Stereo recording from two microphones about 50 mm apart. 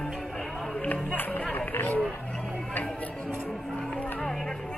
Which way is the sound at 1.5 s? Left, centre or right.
Left.